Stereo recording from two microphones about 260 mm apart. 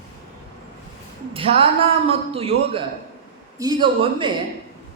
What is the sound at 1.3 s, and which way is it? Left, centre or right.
A man's voice, right.